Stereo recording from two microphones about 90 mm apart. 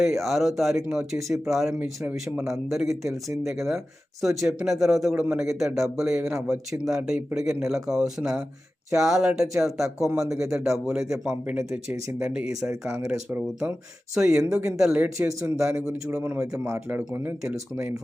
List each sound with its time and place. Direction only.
0.0 s speech: centre (ahead or behind)
1.8 s speech: 15° right (ahead or behind)
2.5 s speech: 5° right (ahead or behind)
16.4 s speech: 30° right (ahead or behind)